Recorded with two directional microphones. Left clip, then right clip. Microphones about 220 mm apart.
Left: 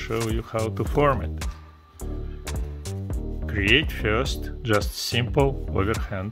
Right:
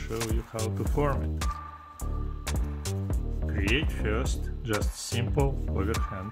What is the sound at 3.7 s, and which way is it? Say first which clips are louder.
Speech: left 9 dB; 35° left (ahead or behind).